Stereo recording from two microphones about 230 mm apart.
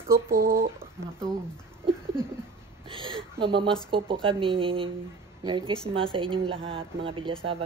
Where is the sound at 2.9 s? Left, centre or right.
Right.